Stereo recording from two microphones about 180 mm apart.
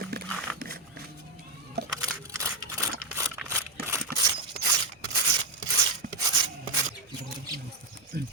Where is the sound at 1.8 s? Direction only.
65° right (ahead or behind).